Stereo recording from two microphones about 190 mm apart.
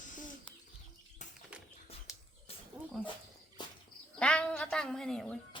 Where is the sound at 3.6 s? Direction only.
25° left (ahead or behind).